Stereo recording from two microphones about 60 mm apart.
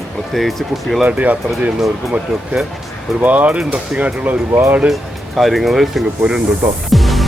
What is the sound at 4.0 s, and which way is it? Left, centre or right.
Speech, right.